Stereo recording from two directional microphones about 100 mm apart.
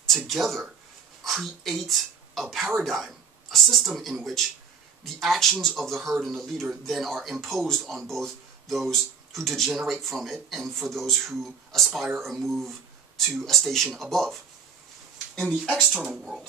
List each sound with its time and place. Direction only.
0.0 s speech: centre (ahead or behind)